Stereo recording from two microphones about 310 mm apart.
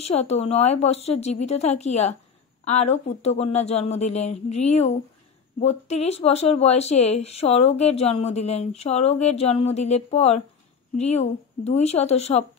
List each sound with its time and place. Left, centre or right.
0.1 s speech: left